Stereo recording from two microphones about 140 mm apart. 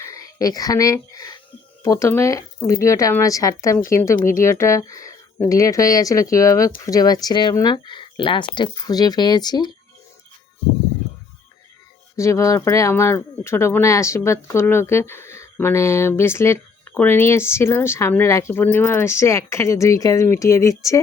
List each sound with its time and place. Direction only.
0.0 s speech: 25° left (ahead or behind)
12.1 s speech: 20° left (ahead or behind)